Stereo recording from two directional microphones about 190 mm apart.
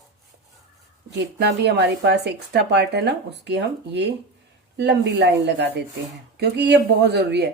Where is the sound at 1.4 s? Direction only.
60° right (ahead or behind).